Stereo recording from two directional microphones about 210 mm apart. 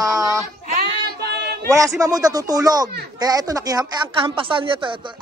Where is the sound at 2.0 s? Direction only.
20° right (ahead or behind).